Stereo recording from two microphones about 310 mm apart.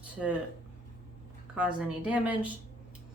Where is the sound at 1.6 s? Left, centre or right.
Centre.